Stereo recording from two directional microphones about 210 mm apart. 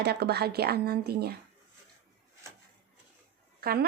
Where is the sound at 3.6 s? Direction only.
50° right (ahead or behind).